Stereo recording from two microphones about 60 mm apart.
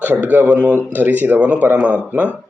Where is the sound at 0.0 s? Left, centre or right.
Right.